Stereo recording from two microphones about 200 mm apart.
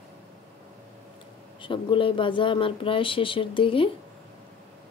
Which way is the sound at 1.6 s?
25° left (ahead or behind).